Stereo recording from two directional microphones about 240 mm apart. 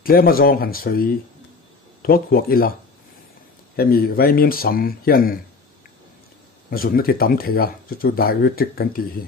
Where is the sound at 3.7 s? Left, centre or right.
Left.